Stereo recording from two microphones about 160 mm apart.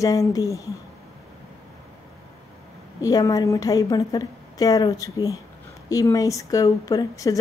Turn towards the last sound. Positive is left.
turn(degrees=20)  # may be behind; listen again after turning